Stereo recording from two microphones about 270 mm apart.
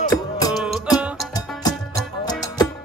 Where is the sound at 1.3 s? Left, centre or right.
Centre.